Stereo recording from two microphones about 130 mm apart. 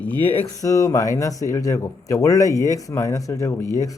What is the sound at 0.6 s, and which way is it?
Speech, 25° left (ahead or behind).